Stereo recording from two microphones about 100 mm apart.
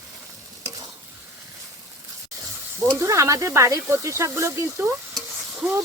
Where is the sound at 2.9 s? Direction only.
30° right (ahead or behind).